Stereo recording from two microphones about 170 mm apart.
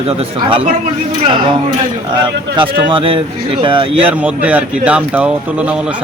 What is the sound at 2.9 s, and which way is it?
Speech, 30° right (ahead or behind).